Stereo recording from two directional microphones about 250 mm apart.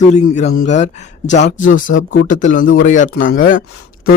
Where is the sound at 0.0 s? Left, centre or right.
Left.